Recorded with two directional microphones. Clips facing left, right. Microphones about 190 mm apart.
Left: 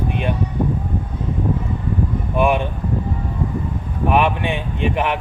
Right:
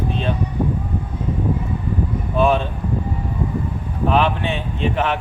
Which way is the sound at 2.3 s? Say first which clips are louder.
Right 1 dB; 15° left (ahead or behind).